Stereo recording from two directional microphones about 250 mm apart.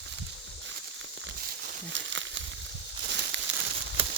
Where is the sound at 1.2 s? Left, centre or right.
Right.